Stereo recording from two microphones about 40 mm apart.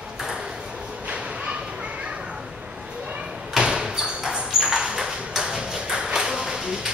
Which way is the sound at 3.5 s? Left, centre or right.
Centre.